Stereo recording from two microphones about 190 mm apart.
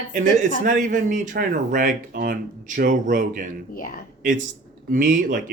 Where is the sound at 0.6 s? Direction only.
40° right (ahead or behind).